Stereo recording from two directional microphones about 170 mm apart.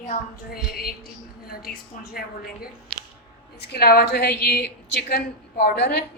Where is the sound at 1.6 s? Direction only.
65° left (ahead or behind).